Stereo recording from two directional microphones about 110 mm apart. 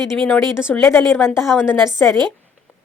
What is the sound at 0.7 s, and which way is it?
Speech, 20° left (ahead or behind).